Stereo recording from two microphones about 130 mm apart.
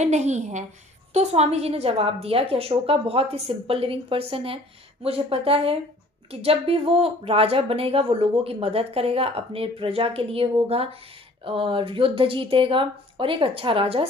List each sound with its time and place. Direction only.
0.0 s a woman's voice: 60° right (ahead or behind); by 14.0 s 45° right (ahead or behind)